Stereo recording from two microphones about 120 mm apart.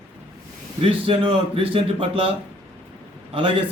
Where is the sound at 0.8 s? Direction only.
50° right (ahead or behind).